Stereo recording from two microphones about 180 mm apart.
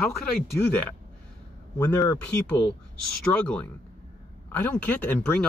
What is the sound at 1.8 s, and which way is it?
Speech, 15° left (ahead or behind).